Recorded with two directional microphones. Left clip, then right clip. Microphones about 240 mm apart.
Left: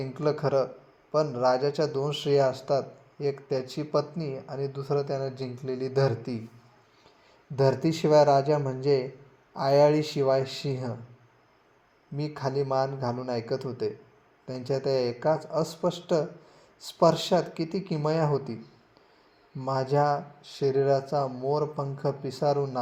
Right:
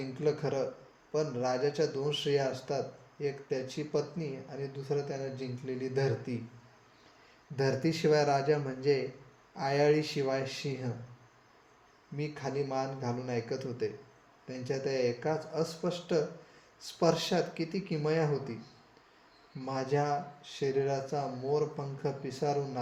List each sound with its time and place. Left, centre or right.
0.2 s speech: left
7.5 s speech: left
12.1 s speech: left
19.6 s speech: left